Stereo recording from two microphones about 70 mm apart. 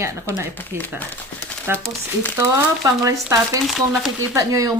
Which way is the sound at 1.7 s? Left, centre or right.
Right.